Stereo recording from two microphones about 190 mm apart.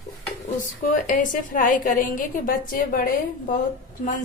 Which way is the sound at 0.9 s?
45° left (ahead or behind).